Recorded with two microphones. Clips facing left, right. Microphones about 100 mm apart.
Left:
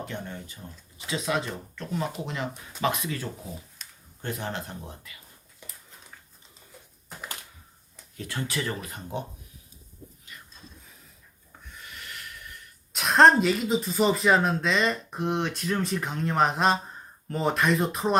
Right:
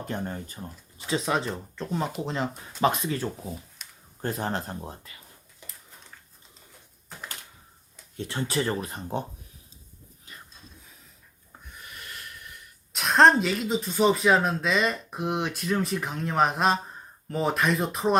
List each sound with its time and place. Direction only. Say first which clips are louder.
0.1 s speech: right 4 dB; 40° right (ahead or behind)
8.1 s speech: right 3 dB; 30° right (ahead or behind)
10.3 s a sound: right 3 dB; 35° right (ahead or behind)
12.9 s speech: left 1 dB; centre (ahead or behind)